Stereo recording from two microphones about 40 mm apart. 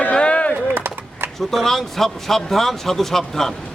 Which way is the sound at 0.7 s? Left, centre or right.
Right.